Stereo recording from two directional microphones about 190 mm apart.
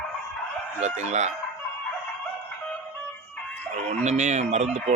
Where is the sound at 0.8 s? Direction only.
40° right (ahead or behind).